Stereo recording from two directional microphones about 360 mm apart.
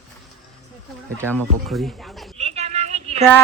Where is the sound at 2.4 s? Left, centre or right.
Centre.